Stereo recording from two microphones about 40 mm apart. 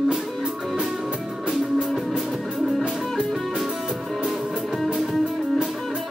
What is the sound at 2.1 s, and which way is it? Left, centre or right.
Music, centre.